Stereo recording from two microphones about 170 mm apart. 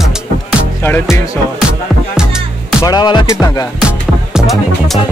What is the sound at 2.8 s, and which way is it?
Music, 25° left (ahead or behind).